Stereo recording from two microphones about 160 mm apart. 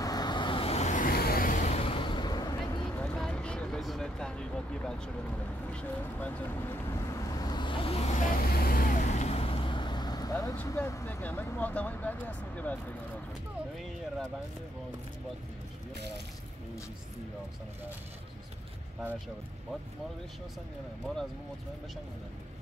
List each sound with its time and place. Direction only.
0.0 s vehicle: 25° left (ahead or behind)
3.0 s vehicle: 5° left (ahead or behind)
5.7 s speech: 10° left (ahead or behind)
6.9 s vehicle: 20° left (ahead or behind)
10.5 s speech: 10° left (ahead or behind)